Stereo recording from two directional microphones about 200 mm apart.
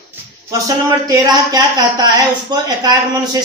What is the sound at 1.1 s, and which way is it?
Speech, 20° right (ahead or behind).